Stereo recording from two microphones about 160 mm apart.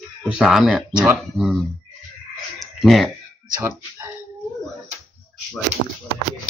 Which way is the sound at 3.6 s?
15° right (ahead or behind).